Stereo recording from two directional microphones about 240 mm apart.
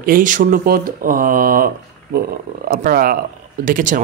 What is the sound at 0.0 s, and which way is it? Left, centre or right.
Speech, right.